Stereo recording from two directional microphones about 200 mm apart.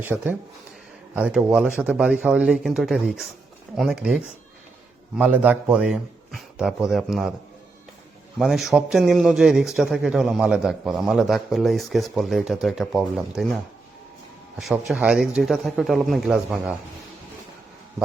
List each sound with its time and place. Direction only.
0.0 s a man's voice: 10° right (ahead or behind)
8.4 s a man's voice: centre (ahead or behind)
14.6 s a man's voice: centre (ahead or behind)